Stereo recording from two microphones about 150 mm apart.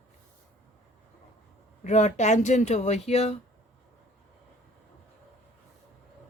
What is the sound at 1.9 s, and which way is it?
Speech, 50° left (ahead or behind).